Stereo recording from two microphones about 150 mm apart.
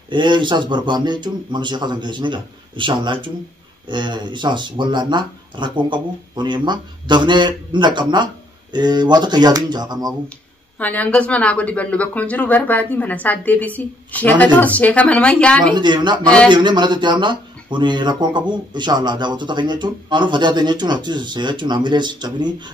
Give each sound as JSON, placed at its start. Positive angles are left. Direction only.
{"t": 0.1, "sound": "speech", "side_deg": -30}
{"t": 10.8, "sound": "a woman's voice", "side_deg": 10}
{"t": 15.7, "sound": "speech", "side_deg": -30}
{"t": 16.2, "sound": "a woman's voice", "side_deg": 5}
{"t": 16.4, "sound": "speech", "side_deg": -30}